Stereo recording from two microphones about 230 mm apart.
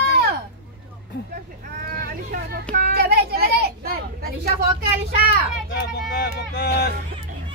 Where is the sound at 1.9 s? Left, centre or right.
Right.